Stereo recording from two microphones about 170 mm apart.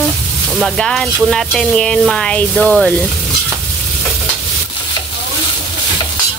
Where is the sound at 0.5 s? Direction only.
Centre (ahead or behind).